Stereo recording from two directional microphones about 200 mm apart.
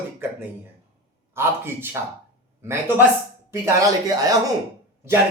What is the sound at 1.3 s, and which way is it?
Speech, 10° right (ahead or behind).